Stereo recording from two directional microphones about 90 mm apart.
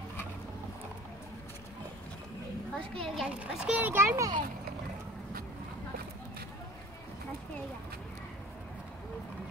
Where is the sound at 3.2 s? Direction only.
15° right (ahead or behind).